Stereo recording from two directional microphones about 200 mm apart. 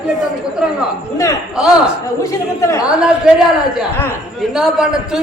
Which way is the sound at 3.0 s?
5° right (ahead or behind).